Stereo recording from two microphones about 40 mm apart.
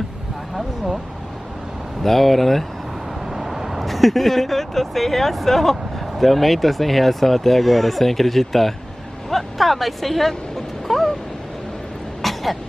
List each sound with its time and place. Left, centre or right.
2.0 s speech: centre
3.3 s speech: centre
10.9 s a sound: centre
12.2 s throat clearing: centre